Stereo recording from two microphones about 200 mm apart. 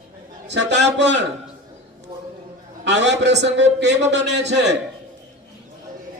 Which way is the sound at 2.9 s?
60° right (ahead or behind).